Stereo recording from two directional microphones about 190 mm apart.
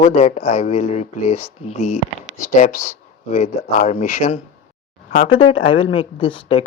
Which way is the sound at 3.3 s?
40° left (ahead or behind).